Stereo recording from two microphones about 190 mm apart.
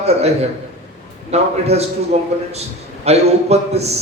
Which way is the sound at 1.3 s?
35° right (ahead or behind).